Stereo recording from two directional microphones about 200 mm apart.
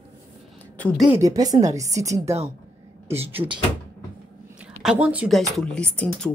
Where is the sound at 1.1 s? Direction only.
15° right (ahead or behind).